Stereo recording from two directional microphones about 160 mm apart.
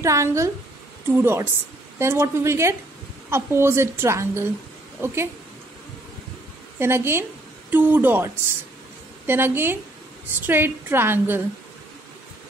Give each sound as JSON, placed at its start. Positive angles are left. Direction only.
{"t": 0.0, "sound": "a woman's voice", "side_deg": -20}
{"t": 6.8, "sound": "a woman's voice", "side_deg": -15}